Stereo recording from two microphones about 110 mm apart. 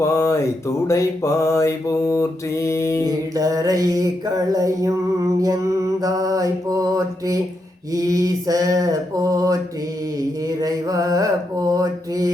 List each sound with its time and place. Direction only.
0.0 s a sound: 25° left (ahead or behind)
0.9 s mantra: 25° left (ahead or behind)
3.0 s mantra: 35° right (ahead or behind)
6.0 s mantra: 35° right (ahead or behind)
7.9 s a sound: 35° right (ahead or behind)
10.2 s mantra: 35° right (ahead or behind)